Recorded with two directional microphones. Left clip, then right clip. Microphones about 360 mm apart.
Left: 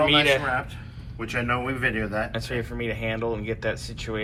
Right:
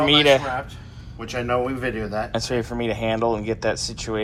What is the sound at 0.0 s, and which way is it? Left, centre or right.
Speech, centre.